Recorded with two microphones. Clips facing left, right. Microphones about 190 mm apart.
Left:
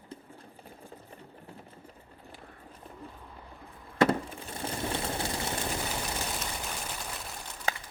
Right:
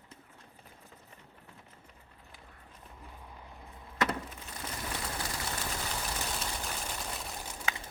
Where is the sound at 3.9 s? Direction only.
30° left (ahead or behind).